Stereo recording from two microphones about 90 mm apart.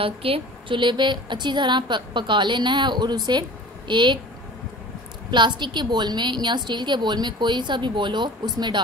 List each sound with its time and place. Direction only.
0.0 s a woman's voice: 85° right; by 4.2 s 60° right (ahead or behind)
5.3 s a woman's voice: 60° right (ahead or behind)